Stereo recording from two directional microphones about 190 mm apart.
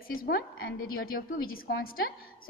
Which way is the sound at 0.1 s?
50° left (ahead or behind).